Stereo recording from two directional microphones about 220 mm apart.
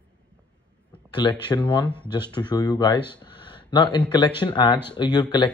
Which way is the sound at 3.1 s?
20° left (ahead or behind).